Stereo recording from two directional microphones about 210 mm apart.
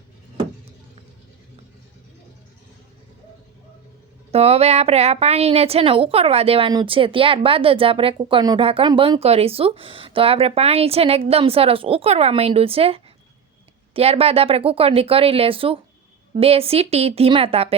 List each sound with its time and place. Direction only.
4.3 s a woman's voice: 30° right (ahead or behind)